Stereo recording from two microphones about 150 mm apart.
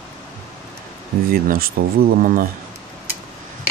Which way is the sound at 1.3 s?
80° right.